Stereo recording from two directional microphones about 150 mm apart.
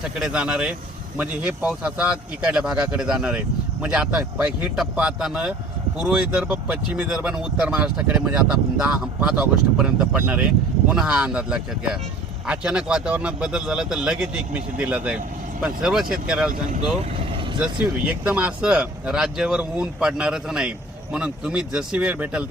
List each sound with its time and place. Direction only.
0.2 s speech: 5° right (ahead or behind)
17.3 s vehicle: 35° right (ahead or behind)
17.6 s speech: 10° right (ahead or behind)